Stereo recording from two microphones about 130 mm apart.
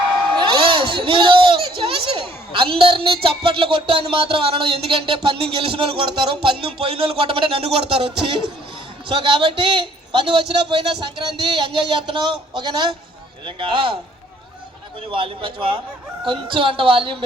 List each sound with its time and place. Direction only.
0.3 s speech: 40° right (ahead or behind)
9.0 s a man's voice: 40° right (ahead or behind)
15.1 s a man's voice: 40° right (ahead or behind)